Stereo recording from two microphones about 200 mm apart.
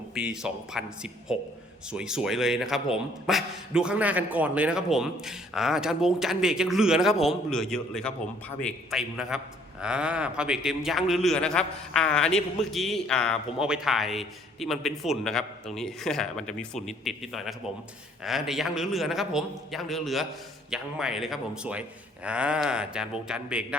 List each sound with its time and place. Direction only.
0.1 s a man's voice: 5° right (ahead or behind)